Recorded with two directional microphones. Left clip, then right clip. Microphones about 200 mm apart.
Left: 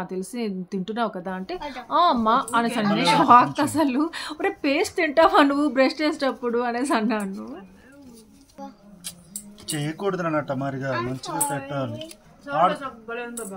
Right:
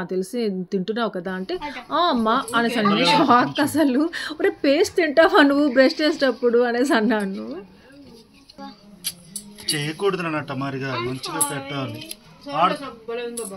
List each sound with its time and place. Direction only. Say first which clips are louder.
0.0 s a woman's voice: right 5 dB; 5° right (ahead or behind)
9.7 s speech: right 4 dB; 70° left (ahead or behind)